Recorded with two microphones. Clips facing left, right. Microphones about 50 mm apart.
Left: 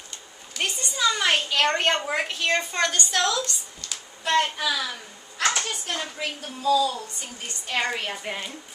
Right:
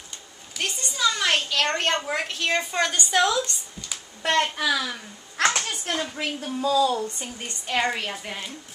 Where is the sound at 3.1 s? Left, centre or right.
Centre.